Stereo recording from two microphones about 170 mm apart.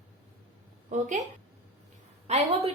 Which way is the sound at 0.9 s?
45° right (ahead or behind).